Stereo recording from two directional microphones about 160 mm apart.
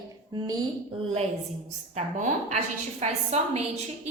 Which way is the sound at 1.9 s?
45° right (ahead or behind).